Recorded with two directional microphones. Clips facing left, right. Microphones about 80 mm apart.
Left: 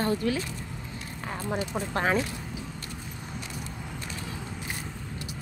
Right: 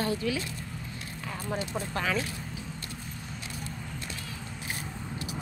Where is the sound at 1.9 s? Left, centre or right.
Left.